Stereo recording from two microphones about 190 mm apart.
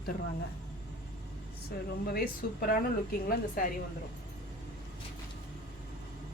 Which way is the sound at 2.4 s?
55° left (ahead or behind).